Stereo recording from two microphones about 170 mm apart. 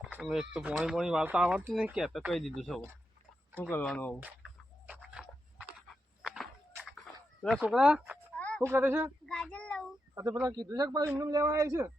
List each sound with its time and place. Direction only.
0.0 s chicken: centre (ahead or behind)
0.5 s speech: 5° right (ahead or behind)
3.6 s speech: 10° left (ahead or behind)
4.9 s a sound: 5° right (ahead or behind)
7.6 s speech: 5° right (ahead or behind)
8.4 s a sound: 5° left (ahead or behind)
8.6 s speech: 15° right (ahead or behind)
9.2 s child singing: 5° left (ahead or behind)
10.4 s a man's voice: 20° right (ahead or behind)